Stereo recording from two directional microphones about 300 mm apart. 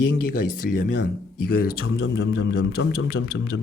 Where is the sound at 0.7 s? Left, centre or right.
Left.